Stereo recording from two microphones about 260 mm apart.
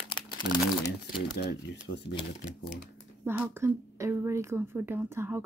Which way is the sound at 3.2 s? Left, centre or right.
Centre.